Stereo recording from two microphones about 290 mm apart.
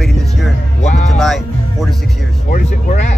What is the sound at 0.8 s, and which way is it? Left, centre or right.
Speech, left.